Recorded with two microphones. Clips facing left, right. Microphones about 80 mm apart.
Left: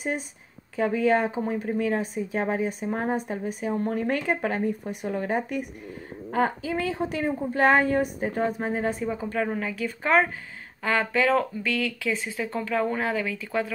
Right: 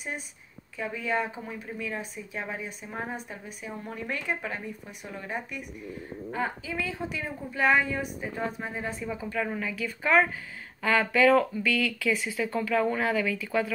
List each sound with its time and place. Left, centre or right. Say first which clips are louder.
0.7 s speech: left 8 dB; left
9.0 s speech: left 4 dB; left